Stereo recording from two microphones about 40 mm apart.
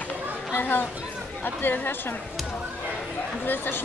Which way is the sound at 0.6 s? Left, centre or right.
Left.